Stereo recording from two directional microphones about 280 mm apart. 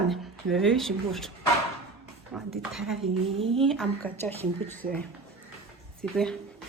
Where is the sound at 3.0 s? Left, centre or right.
Centre.